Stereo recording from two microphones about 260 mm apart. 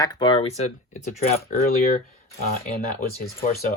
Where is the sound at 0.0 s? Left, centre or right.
Centre; by 2.0 s left.